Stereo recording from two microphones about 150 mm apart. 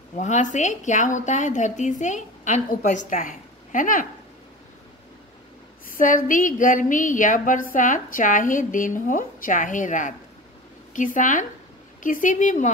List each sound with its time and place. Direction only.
0.2 s a woman's voice: 55° left (ahead or behind)
5.9 s a woman's voice: 65° left (ahead or behind)